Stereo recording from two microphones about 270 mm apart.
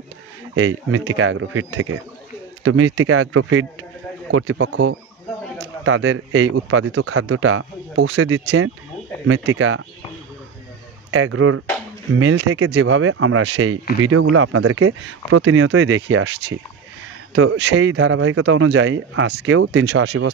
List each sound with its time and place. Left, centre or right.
0.6 s speech: right
11.1 s speech: right